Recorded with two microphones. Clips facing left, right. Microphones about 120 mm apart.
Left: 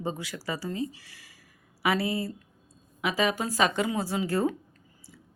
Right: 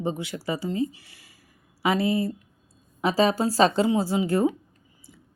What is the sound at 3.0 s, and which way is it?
A woman's voice, 35° right (ahead or behind).